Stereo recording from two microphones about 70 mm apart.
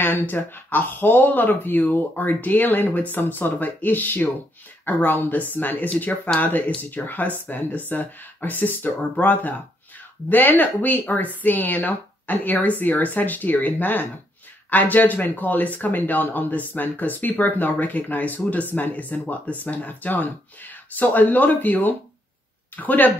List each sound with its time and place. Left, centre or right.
0.0 s speech: left